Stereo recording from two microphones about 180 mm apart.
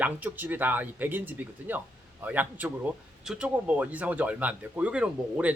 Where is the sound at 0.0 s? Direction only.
10° right (ahead or behind).